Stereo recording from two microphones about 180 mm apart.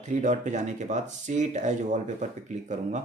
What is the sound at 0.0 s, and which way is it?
Speech, 40° right (ahead or behind).